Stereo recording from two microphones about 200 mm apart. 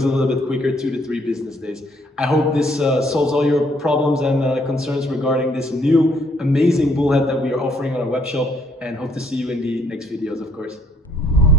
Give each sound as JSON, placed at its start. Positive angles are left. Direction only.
{"t": 0.0, "sound": "a man's voice", "side_deg": 0}